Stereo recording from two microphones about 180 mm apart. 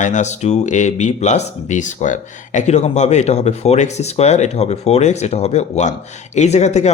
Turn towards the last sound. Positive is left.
turn(degrees=40)  # may be behind; listen again after turning